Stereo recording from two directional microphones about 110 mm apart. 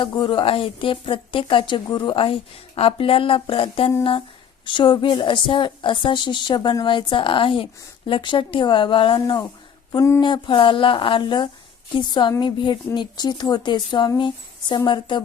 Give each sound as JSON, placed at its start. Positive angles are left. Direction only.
{"t": 0.0, "sound": "a woman's voice", "side_deg": 50}